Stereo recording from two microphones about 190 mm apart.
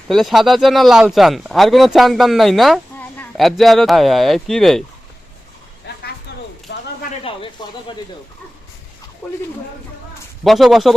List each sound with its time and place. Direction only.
0.1 s speech: centre (ahead or behind)
6.7 s a sound: 60° left (ahead or behind)
7.3 s snake: 25° left (ahead or behind)
10.4 s speech: centre (ahead or behind)